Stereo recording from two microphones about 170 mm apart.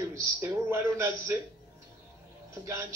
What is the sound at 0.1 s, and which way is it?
Speech, 15° right (ahead or behind).